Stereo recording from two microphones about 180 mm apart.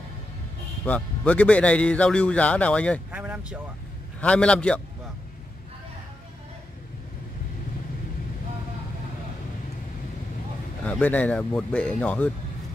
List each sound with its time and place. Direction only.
0.8 s speech: 5° left (ahead or behind)
3.1 s speech: 5° right (ahead or behind)
4.2 s speech: 5° left (ahead or behind)
10.9 s speech: 10° left (ahead or behind)